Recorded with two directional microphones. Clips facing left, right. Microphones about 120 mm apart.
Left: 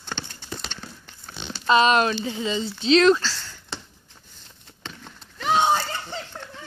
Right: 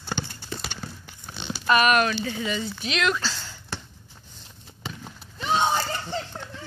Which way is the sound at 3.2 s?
15° right (ahead or behind).